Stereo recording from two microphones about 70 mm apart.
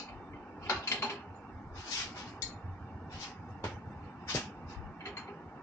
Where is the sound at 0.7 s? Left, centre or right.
Left.